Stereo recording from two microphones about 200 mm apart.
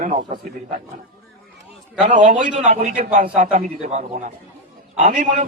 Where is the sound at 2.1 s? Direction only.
40° right (ahead or behind).